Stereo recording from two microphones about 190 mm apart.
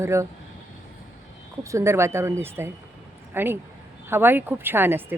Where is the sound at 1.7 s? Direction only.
15° right (ahead or behind).